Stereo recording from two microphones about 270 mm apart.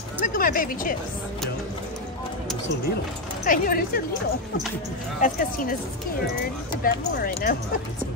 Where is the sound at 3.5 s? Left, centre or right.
Left.